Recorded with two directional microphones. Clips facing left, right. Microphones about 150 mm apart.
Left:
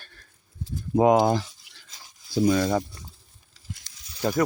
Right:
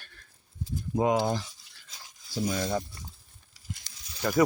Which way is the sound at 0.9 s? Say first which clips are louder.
Left 7 dB; 55° left (ahead or behind).